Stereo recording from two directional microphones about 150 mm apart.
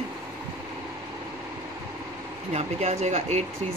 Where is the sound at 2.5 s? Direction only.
45° right (ahead or behind).